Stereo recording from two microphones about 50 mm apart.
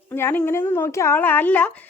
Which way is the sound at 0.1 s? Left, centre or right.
Left.